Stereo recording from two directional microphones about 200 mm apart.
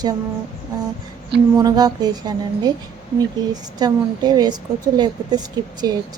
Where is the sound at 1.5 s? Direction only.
20° right (ahead or behind).